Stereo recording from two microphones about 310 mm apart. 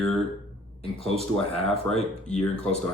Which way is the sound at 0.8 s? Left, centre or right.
Centre.